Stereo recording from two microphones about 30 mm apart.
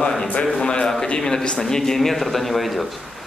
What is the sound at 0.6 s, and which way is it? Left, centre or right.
Speech, left.